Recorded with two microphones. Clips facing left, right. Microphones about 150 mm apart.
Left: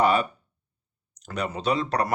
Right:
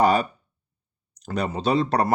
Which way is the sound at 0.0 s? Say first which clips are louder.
Right 2 dB; 35° right (ahead or behind).